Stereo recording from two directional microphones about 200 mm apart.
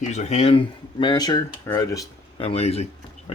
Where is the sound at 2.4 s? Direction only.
30° left (ahead or behind).